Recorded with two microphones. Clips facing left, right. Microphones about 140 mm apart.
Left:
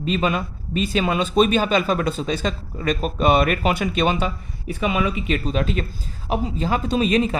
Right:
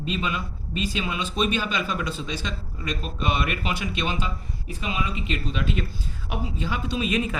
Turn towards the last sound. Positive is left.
turn(degrees=30)  # may be behind; listen again after turning